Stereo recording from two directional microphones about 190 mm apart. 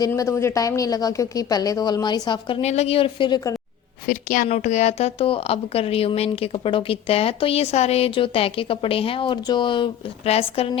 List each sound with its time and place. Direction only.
0.0 s a woman's voice: 15° left (ahead or behind)
4.0 s a woman's voice: 45° left (ahead or behind)